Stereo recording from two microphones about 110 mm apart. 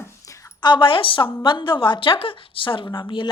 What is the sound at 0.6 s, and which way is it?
Speech, 45° left (ahead or behind).